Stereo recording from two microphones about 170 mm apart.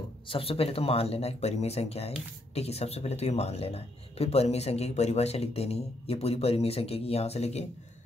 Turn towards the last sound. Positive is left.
turn(degrees=40)  # may be behind; listen again after turning